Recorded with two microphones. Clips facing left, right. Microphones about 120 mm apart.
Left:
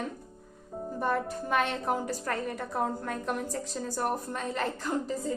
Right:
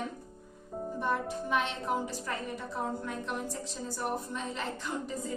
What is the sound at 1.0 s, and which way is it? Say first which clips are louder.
A woman's voice: left 3 dB; 50° left (ahead or behind).